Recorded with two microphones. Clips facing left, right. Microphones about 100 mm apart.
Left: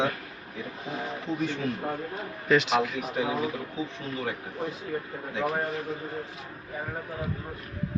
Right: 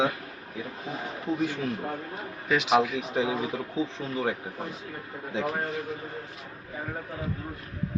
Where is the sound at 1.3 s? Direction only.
55° right (ahead or behind).